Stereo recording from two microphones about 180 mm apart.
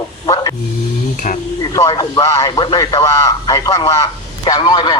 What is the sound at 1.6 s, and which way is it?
Speech, 20° left (ahead or behind).